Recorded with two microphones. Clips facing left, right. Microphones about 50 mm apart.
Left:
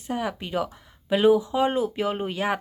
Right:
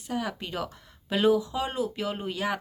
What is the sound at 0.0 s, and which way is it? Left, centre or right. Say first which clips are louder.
Speech: left 3 dB; left.